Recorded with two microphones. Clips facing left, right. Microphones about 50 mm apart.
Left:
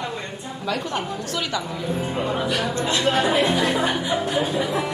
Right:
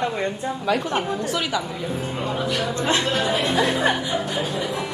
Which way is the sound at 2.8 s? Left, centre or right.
Right.